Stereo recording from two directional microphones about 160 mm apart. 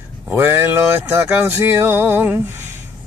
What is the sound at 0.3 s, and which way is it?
Speech, 10° right (ahead or behind).